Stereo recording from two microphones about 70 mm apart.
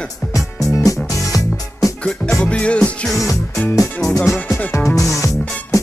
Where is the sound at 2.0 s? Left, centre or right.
Centre.